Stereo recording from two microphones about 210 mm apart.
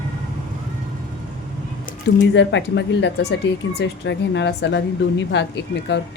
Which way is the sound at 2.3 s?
60° left (ahead or behind).